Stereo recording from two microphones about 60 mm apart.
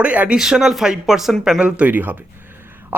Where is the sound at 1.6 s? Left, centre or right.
Centre.